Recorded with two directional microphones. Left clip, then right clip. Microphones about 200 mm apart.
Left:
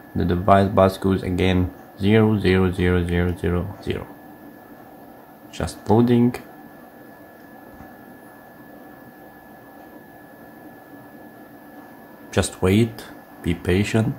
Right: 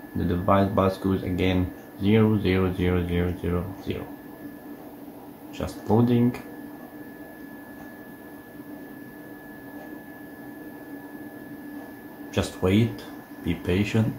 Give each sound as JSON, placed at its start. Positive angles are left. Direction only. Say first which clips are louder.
{"t": 0.5, "sound": "speech", "louder": "left 6 dB", "side_deg": 55}
{"t": 5.6, "sound": "speech", "louder": "left 5 dB", "side_deg": 55}
{"t": 12.3, "sound": "speech", "louder": "left 4 dB", "side_deg": 55}